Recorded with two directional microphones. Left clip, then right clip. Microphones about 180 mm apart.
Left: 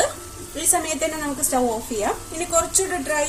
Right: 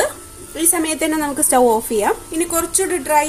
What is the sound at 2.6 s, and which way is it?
Speech, 55° right (ahead or behind).